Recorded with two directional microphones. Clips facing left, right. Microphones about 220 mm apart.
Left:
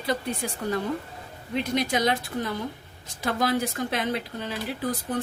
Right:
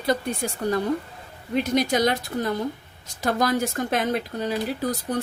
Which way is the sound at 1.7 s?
40° right (ahead or behind).